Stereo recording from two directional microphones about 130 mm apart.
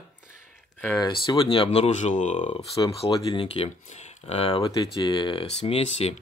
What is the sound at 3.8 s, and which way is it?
Speech, 60° left (ahead or behind).